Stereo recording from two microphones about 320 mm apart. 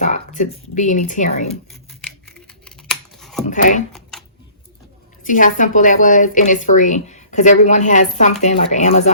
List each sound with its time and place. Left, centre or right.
0.0 s speech: left
1.9 s scissors: centre
3.4 s shuffling cards: left
5.2 s speech: left